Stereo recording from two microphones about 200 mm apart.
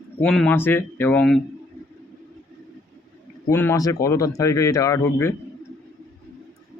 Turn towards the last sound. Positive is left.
turn(degrees=15)  # may be behind; listen again after turning